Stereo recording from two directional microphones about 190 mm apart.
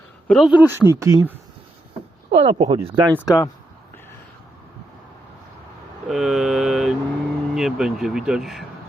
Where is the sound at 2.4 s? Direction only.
30° right (ahead or behind).